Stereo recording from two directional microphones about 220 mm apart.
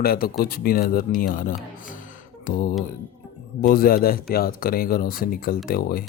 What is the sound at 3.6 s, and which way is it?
Speech, 40° left (ahead or behind).